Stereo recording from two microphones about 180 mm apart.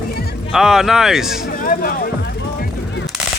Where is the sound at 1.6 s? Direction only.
50° left (ahead or behind).